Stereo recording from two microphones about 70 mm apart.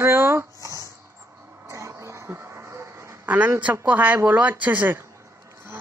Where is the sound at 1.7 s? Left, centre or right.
Right.